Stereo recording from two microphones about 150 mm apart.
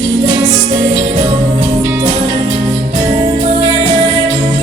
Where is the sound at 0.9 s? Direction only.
45° right (ahead or behind).